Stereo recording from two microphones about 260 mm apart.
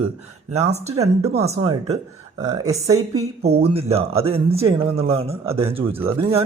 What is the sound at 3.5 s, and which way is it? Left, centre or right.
Speech, right.